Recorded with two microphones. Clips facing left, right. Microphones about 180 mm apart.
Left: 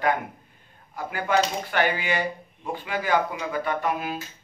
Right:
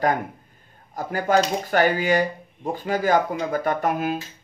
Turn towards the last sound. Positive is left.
turn(degrees=-45)  # may be behind; listen again after turning